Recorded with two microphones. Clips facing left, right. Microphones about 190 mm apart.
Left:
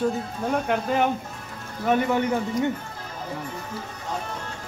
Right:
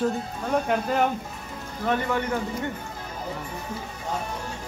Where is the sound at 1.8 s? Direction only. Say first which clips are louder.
Left 3 dB; 15° left (ahead or behind).